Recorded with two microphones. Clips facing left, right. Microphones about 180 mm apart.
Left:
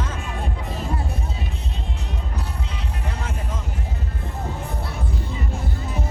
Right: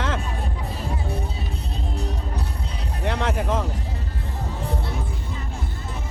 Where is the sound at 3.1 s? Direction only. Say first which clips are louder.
Right 10 dB; 70° right (ahead or behind).